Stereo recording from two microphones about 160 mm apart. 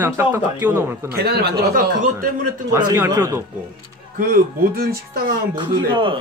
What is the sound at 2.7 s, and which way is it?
Speech, 20° right (ahead or behind).